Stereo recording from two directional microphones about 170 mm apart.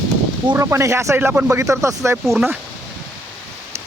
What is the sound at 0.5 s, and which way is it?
Speech, 15° right (ahead or behind).